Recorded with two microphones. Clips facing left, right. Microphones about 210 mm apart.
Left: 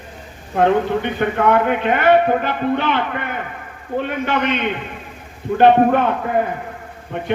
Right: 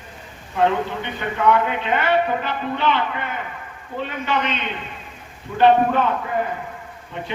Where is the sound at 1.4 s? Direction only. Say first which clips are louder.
Left 2 dB; 55° left (ahead or behind).